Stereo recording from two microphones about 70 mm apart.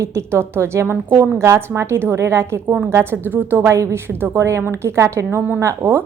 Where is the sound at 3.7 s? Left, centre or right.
Right.